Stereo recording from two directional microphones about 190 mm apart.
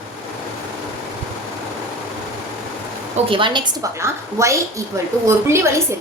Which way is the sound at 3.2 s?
25° right (ahead or behind).